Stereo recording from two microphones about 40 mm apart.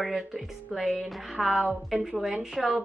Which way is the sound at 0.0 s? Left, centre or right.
Centre.